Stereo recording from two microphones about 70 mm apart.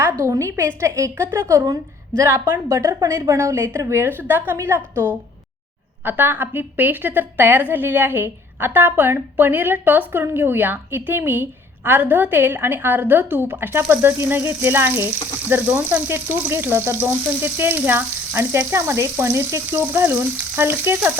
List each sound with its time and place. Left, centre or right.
0.0 s a woman's voice: right